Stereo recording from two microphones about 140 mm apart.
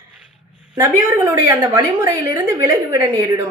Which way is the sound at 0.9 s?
15° right (ahead or behind).